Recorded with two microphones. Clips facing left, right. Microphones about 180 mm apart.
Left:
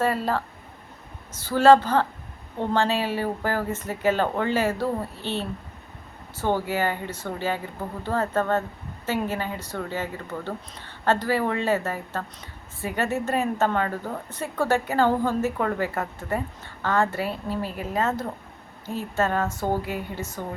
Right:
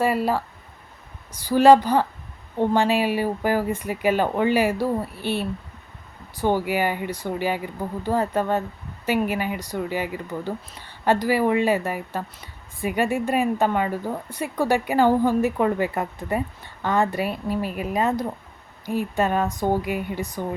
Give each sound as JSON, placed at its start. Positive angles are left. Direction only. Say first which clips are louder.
{"t": 0.0, "sound": "speech", "louder": "right 3 dB", "side_deg": -10}